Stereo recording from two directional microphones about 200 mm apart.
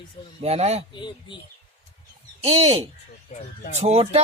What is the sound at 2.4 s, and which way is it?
Speech, 30° right (ahead or behind).